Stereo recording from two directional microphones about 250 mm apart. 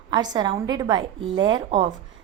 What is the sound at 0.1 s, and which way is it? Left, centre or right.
A woman's voice, centre.